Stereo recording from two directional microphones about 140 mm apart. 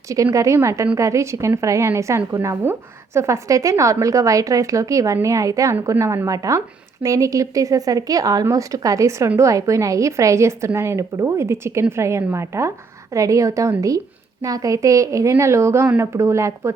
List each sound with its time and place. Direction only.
0.1 s speech: 25° right (ahead or behind)